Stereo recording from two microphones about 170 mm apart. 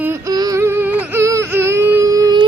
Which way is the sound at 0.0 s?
15° right (ahead or behind).